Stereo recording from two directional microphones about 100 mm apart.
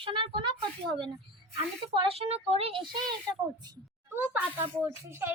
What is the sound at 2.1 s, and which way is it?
Speech, 85° right.